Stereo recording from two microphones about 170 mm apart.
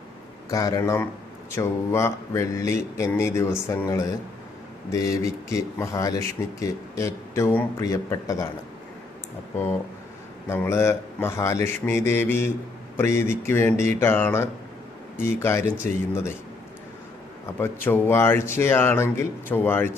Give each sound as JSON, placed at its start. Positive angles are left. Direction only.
{"t": 0.5, "sound": "speech", "side_deg": 20}
{"t": 10.5, "sound": "speech", "side_deg": 15}
{"t": 17.6, "sound": "speech", "side_deg": 15}